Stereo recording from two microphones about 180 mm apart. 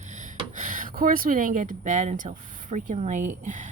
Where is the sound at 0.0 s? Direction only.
45° right (ahead or behind).